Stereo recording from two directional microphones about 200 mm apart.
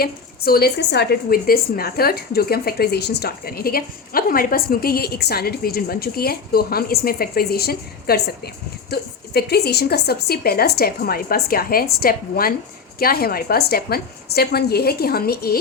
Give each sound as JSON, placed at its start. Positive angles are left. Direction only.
{"t": 0.0, "sound": "a woman's voice", "side_deg": 50}